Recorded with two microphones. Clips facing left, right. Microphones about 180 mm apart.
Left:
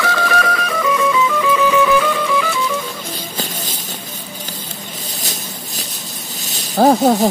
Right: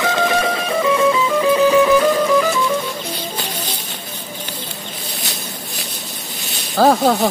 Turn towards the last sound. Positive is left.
turn(degrees=20)  # may be behind; listen again after turning